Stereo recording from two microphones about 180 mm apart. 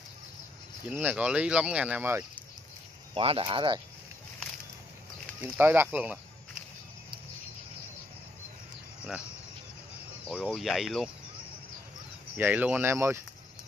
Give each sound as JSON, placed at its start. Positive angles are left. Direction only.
{"t": 0.8, "sound": "speech", "side_deg": -5}
{"t": 3.2, "sound": "speech", "side_deg": -30}
{"t": 5.4, "sound": "speech", "side_deg": -10}
{"t": 10.2, "sound": "speech", "side_deg": -5}
{"t": 12.4, "sound": "speech", "side_deg": -10}